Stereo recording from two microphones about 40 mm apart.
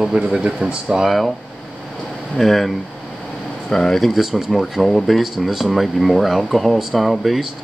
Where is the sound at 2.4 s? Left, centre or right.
Centre.